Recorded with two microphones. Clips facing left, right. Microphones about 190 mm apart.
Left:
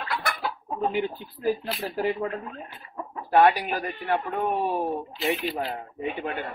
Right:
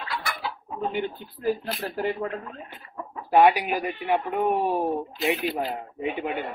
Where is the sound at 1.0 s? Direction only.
Centre (ahead or behind).